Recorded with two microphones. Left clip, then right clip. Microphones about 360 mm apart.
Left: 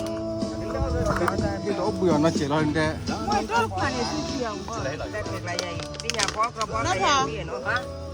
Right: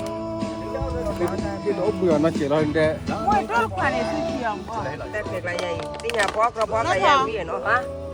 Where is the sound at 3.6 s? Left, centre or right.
Centre.